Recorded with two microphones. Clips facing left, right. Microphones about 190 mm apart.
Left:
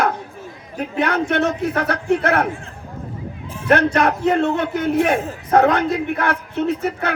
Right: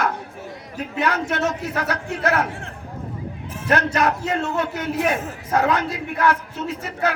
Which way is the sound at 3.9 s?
55° left (ahead or behind).